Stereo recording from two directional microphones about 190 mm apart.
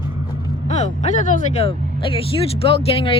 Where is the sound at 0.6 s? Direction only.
35° left (ahead or behind).